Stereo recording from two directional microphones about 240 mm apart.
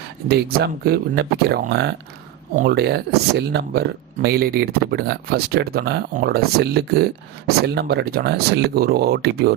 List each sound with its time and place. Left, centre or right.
0.3 s speech: right